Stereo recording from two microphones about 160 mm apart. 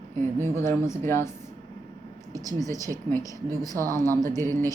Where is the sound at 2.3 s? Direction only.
20° right (ahead or behind).